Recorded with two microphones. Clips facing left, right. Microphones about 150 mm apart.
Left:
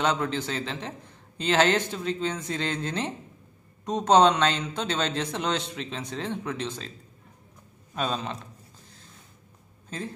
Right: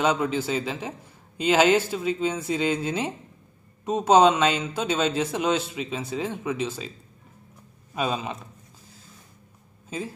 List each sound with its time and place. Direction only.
0.0 s a man's voice: 5° right (ahead or behind)
7.9 s a man's voice: 10° right (ahead or behind)
9.8 s speech: 5° right (ahead or behind)